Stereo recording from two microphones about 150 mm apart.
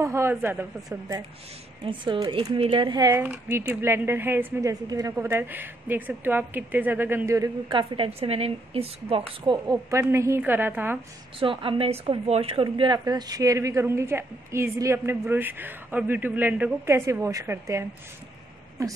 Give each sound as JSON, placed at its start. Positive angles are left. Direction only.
{"t": 0.0, "sound": "speech", "side_deg": -20}
{"t": 1.9, "sound": "a woman's voice", "side_deg": -30}
{"t": 3.1, "sound": "speech", "side_deg": -15}
{"t": 7.7, "sound": "a woman's voice", "side_deg": -35}
{"t": 9.8, "sound": "speech", "side_deg": -20}
{"t": 11.3, "sound": "a woman's voice", "side_deg": -35}